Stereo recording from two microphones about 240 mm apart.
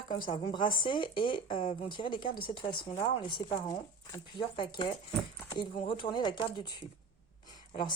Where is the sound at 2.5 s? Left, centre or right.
Centre.